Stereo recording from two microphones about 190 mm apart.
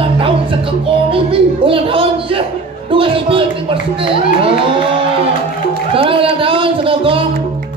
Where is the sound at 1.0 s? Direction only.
30° right (ahead or behind).